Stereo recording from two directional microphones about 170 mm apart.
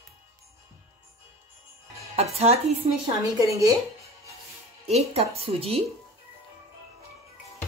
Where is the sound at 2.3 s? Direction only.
35° right (ahead or behind).